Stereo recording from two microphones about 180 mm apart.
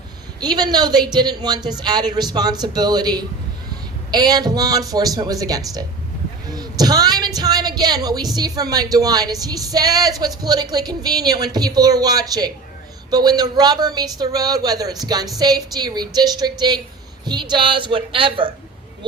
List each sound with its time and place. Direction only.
0.3 s speech: 20° right (ahead or behind)
6.5 s a sound: 20° right (ahead or behind)
7.3 s speech: 20° right (ahead or behind)